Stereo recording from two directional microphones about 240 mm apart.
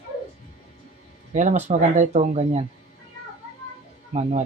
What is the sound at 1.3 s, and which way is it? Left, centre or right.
Speech, right.